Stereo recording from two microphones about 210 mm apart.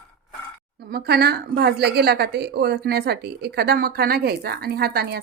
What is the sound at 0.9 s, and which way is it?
Speech, 50° right (ahead or behind).